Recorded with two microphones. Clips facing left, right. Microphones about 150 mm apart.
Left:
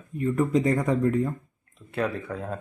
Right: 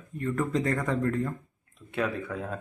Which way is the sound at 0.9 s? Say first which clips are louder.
Left 5 dB; 10° left (ahead or behind).